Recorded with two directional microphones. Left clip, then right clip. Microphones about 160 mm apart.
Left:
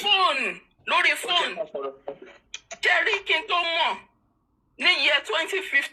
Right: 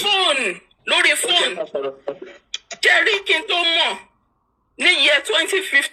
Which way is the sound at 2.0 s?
30° right (ahead or behind).